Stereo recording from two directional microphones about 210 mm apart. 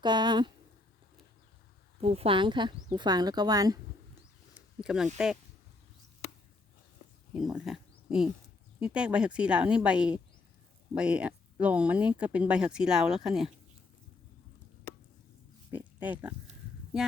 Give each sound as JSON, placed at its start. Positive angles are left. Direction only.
{"t": 0.0, "sound": "speech", "side_deg": -20}
{"t": 2.0, "sound": "speech", "side_deg": -30}
{"t": 4.5, "sound": "a sound", "side_deg": -5}
{"t": 5.1, "sound": "speech", "side_deg": -5}
{"t": 7.3, "sound": "speech", "side_deg": 0}
{"t": 15.7, "sound": "pig", "side_deg": -10}